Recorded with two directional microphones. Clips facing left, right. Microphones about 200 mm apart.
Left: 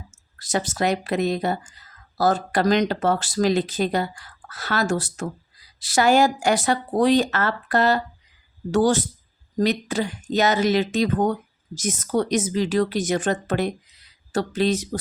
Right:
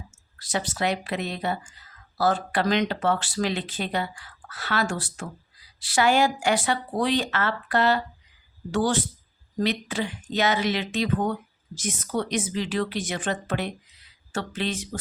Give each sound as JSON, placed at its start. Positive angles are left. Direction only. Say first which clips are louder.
{"t": 0.3, "sound": "speech", "louder": "left 4 dB", "side_deg": 45}